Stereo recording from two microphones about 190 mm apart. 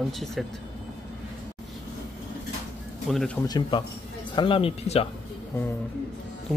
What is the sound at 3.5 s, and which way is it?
Speech, 25° left (ahead or behind).